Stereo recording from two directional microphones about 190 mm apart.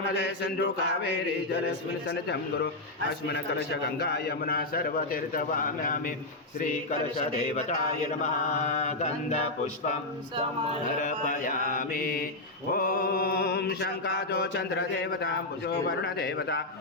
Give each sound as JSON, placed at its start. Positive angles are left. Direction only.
{"t": 0.4, "sound": "mantra", "side_deg": 60}
{"t": 3.2, "sound": "a man's voice", "side_deg": 60}
{"t": 7.3, "sound": "mantra", "side_deg": 40}
{"t": 10.9, "sound": "a man's voice", "side_deg": 40}
{"t": 12.7, "sound": "mantra", "side_deg": 50}